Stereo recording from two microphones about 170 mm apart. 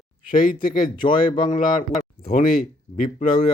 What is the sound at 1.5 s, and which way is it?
Speech, 45° left (ahead or behind).